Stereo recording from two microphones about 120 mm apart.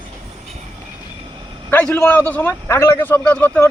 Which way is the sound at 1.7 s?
10° left (ahead or behind).